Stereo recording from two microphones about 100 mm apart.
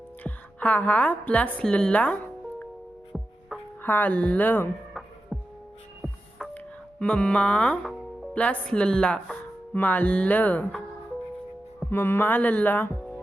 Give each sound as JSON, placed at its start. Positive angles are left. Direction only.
{"t": 0.2, "sound": "speech", "side_deg": 15}
{"t": 3.8, "sound": "speech", "side_deg": 20}
{"t": 5.3, "sound": "music", "side_deg": 0}
{"t": 7.0, "sound": "speech", "side_deg": 10}
{"t": 11.9, "sound": "speech", "side_deg": 20}